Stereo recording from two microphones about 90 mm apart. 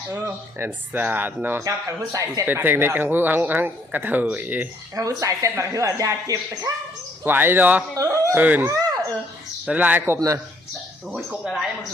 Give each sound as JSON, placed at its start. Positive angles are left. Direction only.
{"t": 0.1, "sound": "speech", "side_deg": -25}
{"t": 1.6, "sound": "speech", "side_deg": -35}
{"t": 2.5, "sound": "speech", "side_deg": -25}
{"t": 4.9, "sound": "speech", "side_deg": -35}
{"t": 7.3, "sound": "speech", "side_deg": -20}
{"t": 7.9, "sound": "speech", "side_deg": -35}
{"t": 8.4, "sound": "speech", "side_deg": -15}
{"t": 8.6, "sound": "a sound", "side_deg": -40}
{"t": 9.6, "sound": "speech", "side_deg": -15}
{"t": 11.3, "sound": "speech", "side_deg": -5}